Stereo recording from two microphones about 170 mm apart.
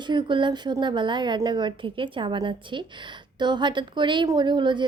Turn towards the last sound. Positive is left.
turn(degrees=-25)  # may be behind; listen again after turning